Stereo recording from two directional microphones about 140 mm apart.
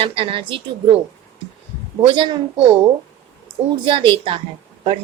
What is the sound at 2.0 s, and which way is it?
Speech, 35° right (ahead or behind).